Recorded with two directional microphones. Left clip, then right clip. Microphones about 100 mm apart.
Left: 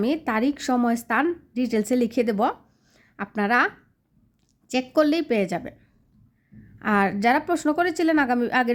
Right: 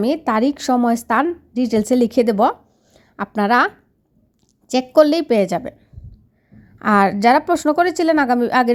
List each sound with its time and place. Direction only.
0.0 s a woman's voice: 30° right (ahead or behind)
4.7 s a woman's voice: 25° right (ahead or behind)